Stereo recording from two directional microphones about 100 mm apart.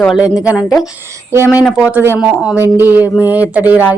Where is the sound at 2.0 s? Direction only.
20° right (ahead or behind).